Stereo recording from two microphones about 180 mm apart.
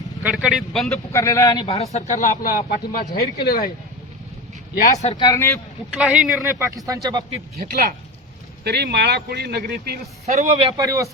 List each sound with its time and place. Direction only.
0.2 s speech: 5° right (ahead or behind)
1.1 s speech: 15° left (ahead or behind)
1.9 s speech: 40° left (ahead or behind); by 3.7 s 55° left (ahead or behind)
5.2 s a man's voice: 20° left (ahead or behind)
5.9 s speech: 5° right (ahead or behind)
6.4 s speech: 15° right (ahead or behind)
7.5 s a man's voice: 55° right (ahead or behind)
8.6 s a man's voice: 65° right (ahead or behind)
10.2 s a man's voice: 40° right (ahead or behind)
10.7 s speech: 20° right (ahead or behind)